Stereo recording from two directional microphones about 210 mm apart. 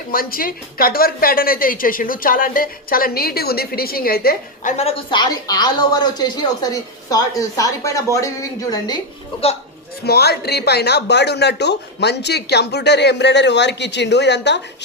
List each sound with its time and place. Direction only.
0.1 s a woman's voice: 45° left (ahead or behind)
4.8 s speech: 25° left (ahead or behind)
10.0 s a woman's voice: 50° left (ahead or behind)